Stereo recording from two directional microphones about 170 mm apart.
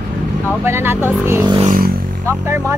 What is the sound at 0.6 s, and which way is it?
Speech, 15° right (ahead or behind).